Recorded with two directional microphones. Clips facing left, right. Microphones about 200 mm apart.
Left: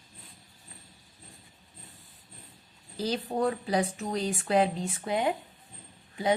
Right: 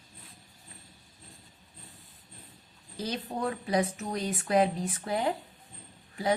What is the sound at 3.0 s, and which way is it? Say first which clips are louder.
Speech: left 4 dB; 30° left (ahead or behind).